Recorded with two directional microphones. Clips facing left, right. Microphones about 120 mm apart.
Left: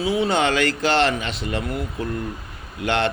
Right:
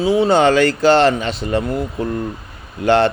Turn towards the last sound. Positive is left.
turn(degrees=-35)  # may be behind; listen again after turning